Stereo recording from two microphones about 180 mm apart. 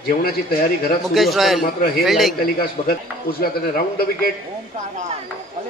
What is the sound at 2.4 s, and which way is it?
A man's voice, 55° left (ahead or behind).